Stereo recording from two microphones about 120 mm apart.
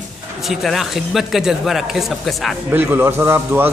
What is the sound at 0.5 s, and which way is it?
Speech, centre (ahead or behind).